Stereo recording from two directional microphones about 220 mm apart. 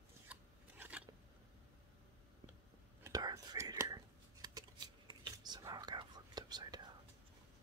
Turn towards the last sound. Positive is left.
turn(degrees=-20)  # may be behind; listen again after turning